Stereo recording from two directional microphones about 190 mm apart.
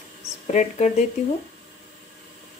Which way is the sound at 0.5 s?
40° left (ahead or behind).